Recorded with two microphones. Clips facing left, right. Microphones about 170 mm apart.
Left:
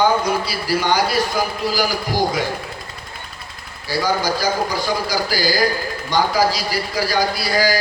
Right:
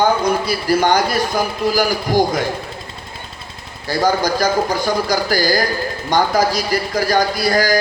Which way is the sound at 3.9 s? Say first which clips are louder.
Right 3 dB; 45° right (ahead or behind).